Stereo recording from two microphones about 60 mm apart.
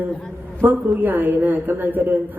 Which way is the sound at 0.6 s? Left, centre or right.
Right.